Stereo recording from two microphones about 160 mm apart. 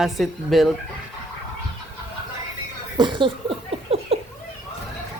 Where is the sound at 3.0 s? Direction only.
30° right (ahead or behind).